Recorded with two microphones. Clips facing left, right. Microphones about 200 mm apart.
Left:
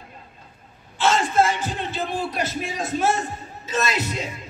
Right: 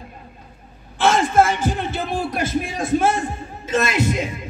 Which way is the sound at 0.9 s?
55° right (ahead or behind).